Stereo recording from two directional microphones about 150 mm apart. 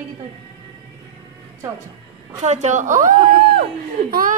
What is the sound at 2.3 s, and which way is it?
A woman's voice, 50° right (ahead or behind).